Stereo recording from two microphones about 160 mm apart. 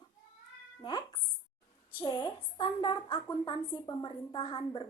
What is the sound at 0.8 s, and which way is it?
Music, 30° left (ahead or behind).